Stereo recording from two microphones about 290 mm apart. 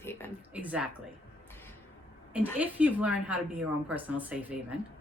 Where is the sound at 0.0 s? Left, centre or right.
Centre.